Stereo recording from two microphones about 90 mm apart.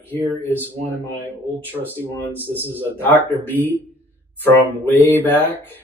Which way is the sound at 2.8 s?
20° left (ahead or behind).